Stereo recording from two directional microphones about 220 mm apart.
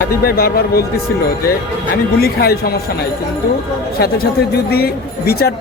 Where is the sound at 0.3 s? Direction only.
45° left (ahead or behind).